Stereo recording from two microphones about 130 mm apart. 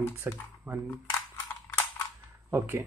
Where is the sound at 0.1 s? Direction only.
20° right (ahead or behind).